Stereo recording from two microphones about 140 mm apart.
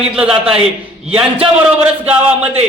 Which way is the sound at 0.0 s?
5° right (ahead or behind).